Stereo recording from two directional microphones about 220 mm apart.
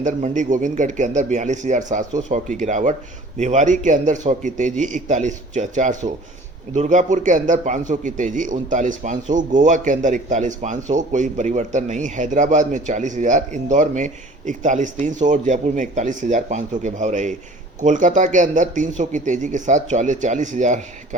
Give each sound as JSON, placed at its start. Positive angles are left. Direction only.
{"t": 0.0, "sound": "a man's voice", "side_deg": -35}